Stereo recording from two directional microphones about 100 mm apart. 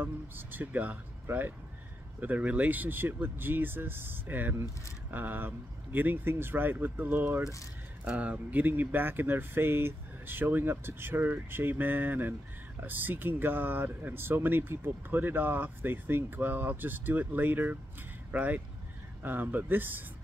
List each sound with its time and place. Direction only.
0.0 s speech: 20° right (ahead or behind)